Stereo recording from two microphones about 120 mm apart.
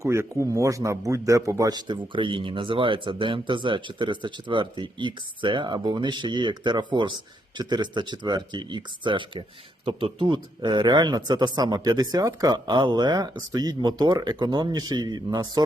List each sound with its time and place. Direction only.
0.0 s a man's voice: 25° right (ahead or behind)